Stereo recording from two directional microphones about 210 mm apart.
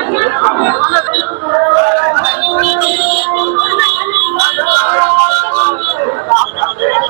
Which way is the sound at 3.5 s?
15° right (ahead or behind).